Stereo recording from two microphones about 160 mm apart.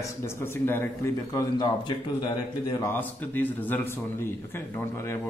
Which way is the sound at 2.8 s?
10° left (ahead or behind).